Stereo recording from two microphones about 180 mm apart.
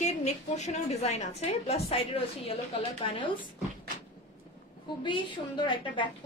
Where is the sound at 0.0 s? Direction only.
40° left (ahead or behind).